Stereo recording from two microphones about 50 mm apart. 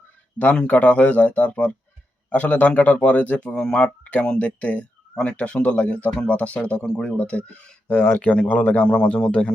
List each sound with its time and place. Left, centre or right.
0.5 s speech: left
4.0 s speech: left
7.9 s speech: left
8.4 s speech: left